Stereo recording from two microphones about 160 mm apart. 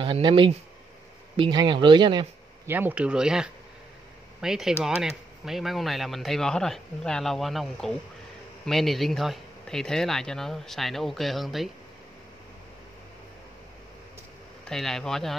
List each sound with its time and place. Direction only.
0.0 s speech: 35° right (ahead or behind)
2.6 s speech: 15° right (ahead or behind)
14.7 s speech: centre (ahead or behind)